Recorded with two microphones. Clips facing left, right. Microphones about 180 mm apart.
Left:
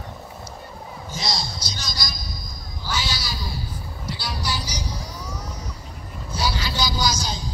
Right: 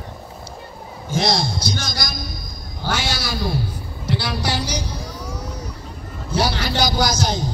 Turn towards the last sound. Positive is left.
turn(degrees=-70)  # may be behind; listen again after turning